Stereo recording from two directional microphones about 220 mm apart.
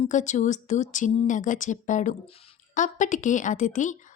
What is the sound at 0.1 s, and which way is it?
Speech, 35° left (ahead or behind).